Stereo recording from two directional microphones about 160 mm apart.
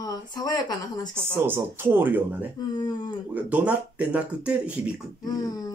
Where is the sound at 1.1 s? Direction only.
15° right (ahead or behind).